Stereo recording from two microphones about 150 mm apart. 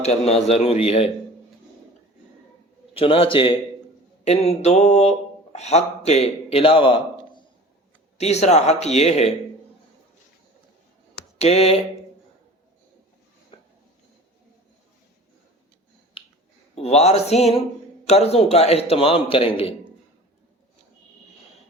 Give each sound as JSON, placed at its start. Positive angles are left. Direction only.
{"t": 0.0, "sound": "speech", "side_deg": 45}
{"t": 2.9, "sound": "a man's voice", "side_deg": 35}
{"t": 4.2, "sound": "speech", "side_deg": 45}
{"t": 8.2, "sound": "speech", "side_deg": 45}
{"t": 11.3, "sound": "a sound", "side_deg": 45}
{"t": 13.5, "sound": "dishes", "side_deg": 35}
{"t": 16.7, "sound": "a man's voice", "side_deg": 45}